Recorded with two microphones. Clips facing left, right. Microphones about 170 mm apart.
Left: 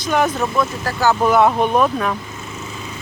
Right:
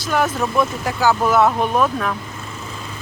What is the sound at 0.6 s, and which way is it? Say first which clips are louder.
Speech: right 2 dB; 20° right (ahead or behind).